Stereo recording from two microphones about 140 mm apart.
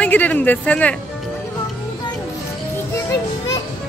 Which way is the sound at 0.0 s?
10° left (ahead or behind).